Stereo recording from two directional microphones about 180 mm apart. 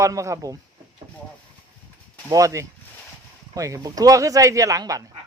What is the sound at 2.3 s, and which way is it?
A man's voice, 15° right (ahead or behind).